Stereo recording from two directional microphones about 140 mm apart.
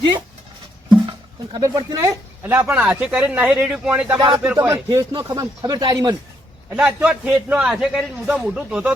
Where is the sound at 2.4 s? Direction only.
15° right (ahead or behind); by 6.2 s 30° right (ahead or behind).